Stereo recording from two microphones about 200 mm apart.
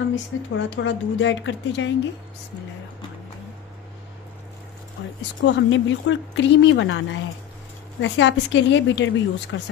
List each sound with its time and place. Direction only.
0.1 s speech: 65° left (ahead or behind)
5.4 s speech: 70° left (ahead or behind)